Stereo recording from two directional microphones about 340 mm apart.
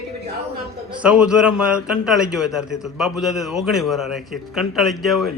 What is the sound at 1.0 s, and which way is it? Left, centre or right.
A man's voice, centre.